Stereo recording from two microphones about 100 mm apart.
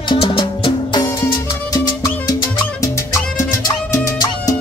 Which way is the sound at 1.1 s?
35° left (ahead or behind).